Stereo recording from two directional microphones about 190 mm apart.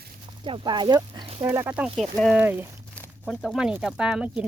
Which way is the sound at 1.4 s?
10° right (ahead or behind).